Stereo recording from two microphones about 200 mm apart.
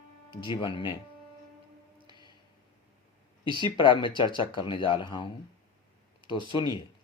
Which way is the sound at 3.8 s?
25° left (ahead or behind).